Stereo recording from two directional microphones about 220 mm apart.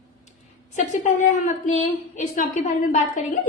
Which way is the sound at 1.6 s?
35° left (ahead or behind).